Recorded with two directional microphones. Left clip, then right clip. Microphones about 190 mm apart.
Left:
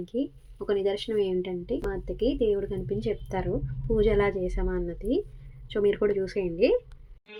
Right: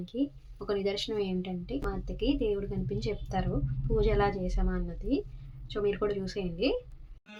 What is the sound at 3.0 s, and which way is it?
A woman's voice, 15° left (ahead or behind).